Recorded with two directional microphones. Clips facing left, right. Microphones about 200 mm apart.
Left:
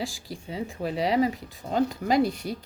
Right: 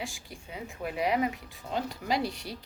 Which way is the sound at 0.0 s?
35° left (ahead or behind).